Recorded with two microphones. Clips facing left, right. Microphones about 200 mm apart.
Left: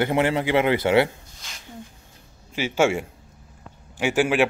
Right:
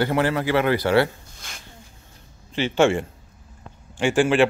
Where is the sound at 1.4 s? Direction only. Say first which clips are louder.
Right 2 dB; 55° right (ahead or behind).